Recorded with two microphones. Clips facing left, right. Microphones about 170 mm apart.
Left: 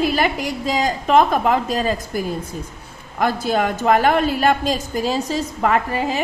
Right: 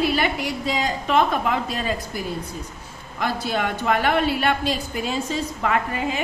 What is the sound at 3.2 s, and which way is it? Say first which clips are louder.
A woman's voice: left 5 dB; 45° left (ahead or behind).